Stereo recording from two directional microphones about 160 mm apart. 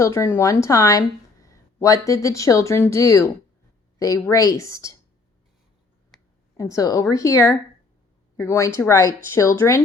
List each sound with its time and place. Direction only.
0.0 s speech: 15° left (ahead or behind)
6.6 s speech: 20° left (ahead or behind)